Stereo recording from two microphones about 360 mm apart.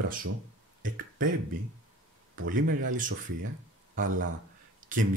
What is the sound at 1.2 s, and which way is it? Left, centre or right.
Speech, right.